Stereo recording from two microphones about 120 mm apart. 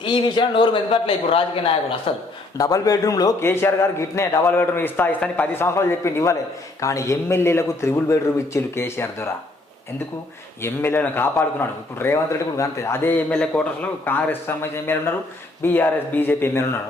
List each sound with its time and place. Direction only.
0.0 s a man's voice: 40° left (ahead or behind)
2.6 s speech: 30° left (ahead or behind)
3.4 s a man's voice: 20° left (ahead or behind)
10.6 s a man's voice: 20° left (ahead or behind)